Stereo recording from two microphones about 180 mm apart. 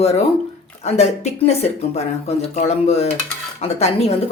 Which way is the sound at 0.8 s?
35° left (ahead or behind).